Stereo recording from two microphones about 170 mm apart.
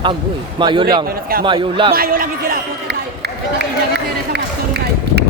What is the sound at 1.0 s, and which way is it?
Speech, 60° right (ahead or behind).